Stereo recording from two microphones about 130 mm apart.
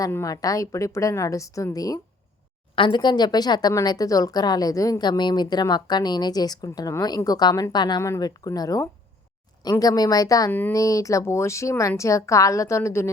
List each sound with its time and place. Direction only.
0.0 s a woman's voice: 25° left (ahead or behind)
2.7 s a woman's voice: 40° left (ahead or behind)
10.5 s speech: 15° left (ahead or behind)
10.8 s a woman's voice: 25° left (ahead or behind)